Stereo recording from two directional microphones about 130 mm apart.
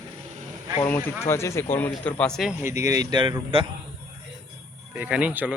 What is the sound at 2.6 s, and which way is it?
Speech, 20° right (ahead or behind).